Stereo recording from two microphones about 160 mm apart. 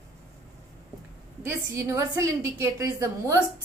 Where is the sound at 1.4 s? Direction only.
20° right (ahead or behind).